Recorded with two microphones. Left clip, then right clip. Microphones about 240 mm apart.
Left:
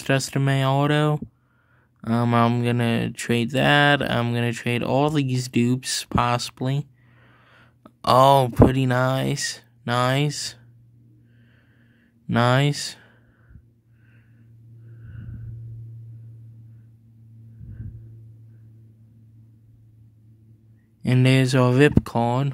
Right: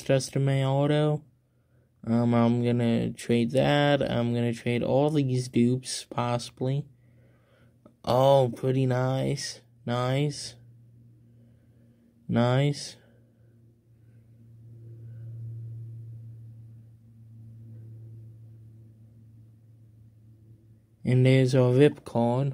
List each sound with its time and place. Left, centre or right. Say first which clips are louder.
0.0 s speech: left 3 dB; left
12.3 s speech: left 6 dB; left
21.0 s speech: left 3 dB; left